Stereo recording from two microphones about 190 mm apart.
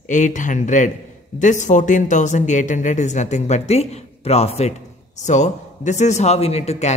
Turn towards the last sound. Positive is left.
turn(degrees=35)  # may be behind; listen again after turning